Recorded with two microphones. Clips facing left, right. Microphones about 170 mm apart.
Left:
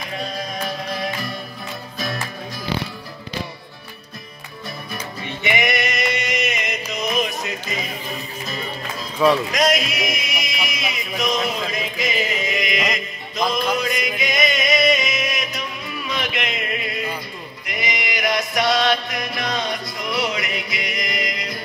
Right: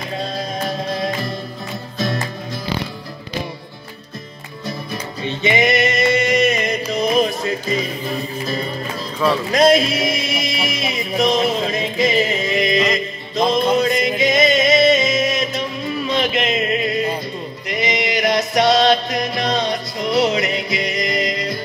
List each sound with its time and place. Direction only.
0.2 s music: 25° right (ahead or behind)
4.6 s music: 25° right (ahead or behind)
9.5 s music: 30° right (ahead or behind)